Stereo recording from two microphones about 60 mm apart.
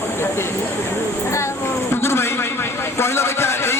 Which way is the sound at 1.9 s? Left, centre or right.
Left.